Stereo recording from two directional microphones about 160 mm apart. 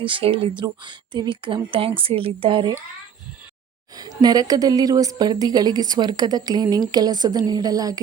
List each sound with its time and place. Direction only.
0.0 s speech: 35° right (ahead or behind)
3.9 s a woman's voice: 25° right (ahead or behind)